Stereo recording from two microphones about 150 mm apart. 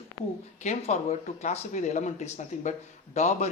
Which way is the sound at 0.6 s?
50° left (ahead or behind).